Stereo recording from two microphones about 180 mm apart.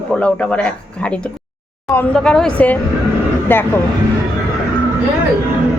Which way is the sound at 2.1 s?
5° left (ahead or behind).